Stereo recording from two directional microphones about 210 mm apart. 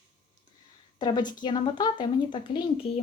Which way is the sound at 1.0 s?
20° left (ahead or behind).